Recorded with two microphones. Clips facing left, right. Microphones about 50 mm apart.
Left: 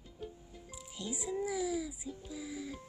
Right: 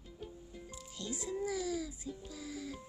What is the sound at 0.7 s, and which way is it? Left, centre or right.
Music, centre.